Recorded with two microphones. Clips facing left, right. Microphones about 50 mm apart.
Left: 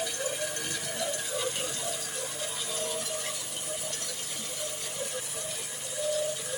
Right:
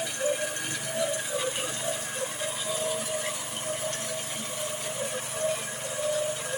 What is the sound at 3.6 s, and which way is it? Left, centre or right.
Vehicle, right.